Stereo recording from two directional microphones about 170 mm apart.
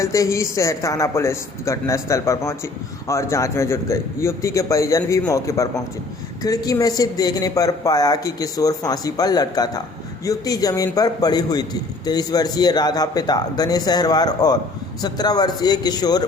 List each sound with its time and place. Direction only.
0.0 s a man's voice: 20° left (ahead or behind)